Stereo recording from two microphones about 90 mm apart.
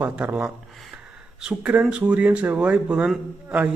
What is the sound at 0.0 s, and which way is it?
A man's voice, 20° right (ahead or behind).